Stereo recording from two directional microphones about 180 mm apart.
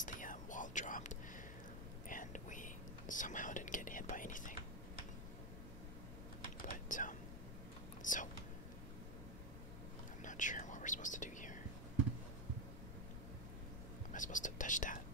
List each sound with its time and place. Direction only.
0.0 s whispering: 45° left (ahead or behind)
6.6 s typing: 45° left (ahead or behind)
8.0 s whispering: 45° left (ahead or behind)
10.2 s whispering: 45° left (ahead or behind)
14.1 s whispering: 45° left (ahead or behind)